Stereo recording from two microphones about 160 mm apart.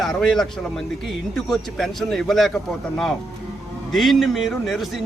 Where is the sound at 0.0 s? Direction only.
Centre (ahead or behind).